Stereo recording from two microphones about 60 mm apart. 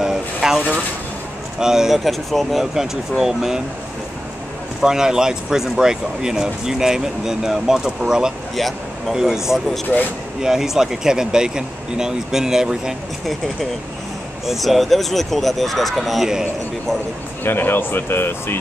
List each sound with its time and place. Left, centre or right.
0.0 s a sound: centre
1.6 s speech: centre
4.8 s speech: centre
8.5 s speech: centre
9.9 s speech: left
10.4 s speech: centre
14.4 s speech: centre
17.4 s speech: left